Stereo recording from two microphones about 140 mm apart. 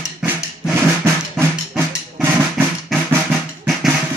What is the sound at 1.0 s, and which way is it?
Drum, 15° right (ahead or behind).